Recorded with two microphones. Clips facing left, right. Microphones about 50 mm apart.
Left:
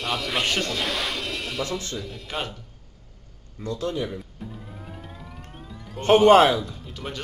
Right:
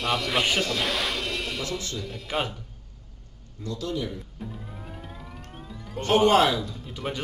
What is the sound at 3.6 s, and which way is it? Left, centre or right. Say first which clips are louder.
Speech: left 3 dB; left.